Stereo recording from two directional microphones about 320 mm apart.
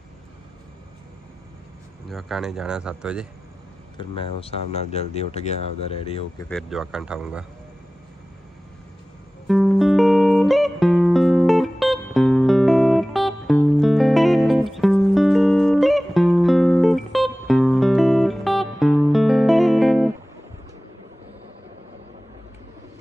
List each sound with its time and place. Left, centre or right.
2.0 s speech: centre
4.0 s speech: centre
6.5 s speech: centre
9.5 s music: centre